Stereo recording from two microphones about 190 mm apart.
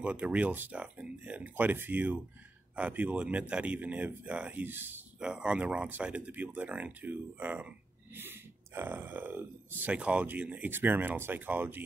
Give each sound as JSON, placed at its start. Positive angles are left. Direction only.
{"t": 0.0, "sound": "speech", "side_deg": -5}